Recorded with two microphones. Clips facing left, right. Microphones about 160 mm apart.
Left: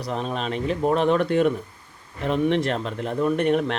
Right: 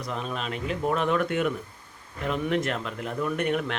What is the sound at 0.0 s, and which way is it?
Speech, 35° left (ahead or behind).